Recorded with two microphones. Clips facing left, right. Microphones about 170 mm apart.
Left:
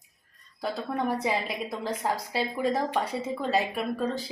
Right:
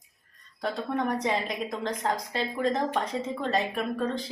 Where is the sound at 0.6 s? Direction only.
5° left (ahead or behind).